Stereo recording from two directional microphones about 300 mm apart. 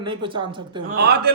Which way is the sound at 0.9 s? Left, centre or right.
Right.